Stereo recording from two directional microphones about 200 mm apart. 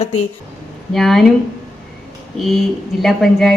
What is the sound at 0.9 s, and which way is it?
Speech, centre (ahead or behind).